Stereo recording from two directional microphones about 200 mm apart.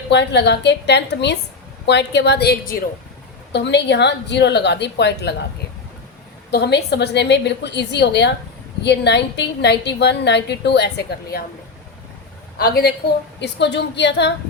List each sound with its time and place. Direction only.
0.1 s a woman's voice: 60° left (ahead or behind)
6.5 s a woman's voice: 55° left (ahead or behind)
12.5 s a woman's voice: 50° left (ahead or behind)